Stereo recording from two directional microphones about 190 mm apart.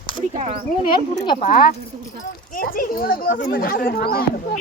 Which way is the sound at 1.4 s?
50° left (ahead or behind).